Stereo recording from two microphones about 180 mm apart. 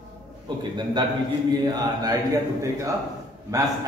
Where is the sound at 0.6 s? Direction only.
25° right (ahead or behind).